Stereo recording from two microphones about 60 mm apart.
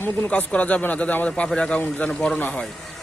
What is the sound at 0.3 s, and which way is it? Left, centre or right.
Speech, left.